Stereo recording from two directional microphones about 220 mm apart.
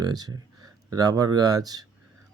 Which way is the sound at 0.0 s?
15° right (ahead or behind).